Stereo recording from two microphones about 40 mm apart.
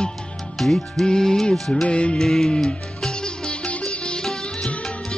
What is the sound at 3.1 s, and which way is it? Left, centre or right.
Sitar, left.